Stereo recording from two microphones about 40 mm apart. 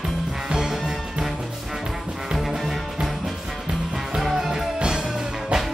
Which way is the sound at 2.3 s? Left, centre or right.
Centre.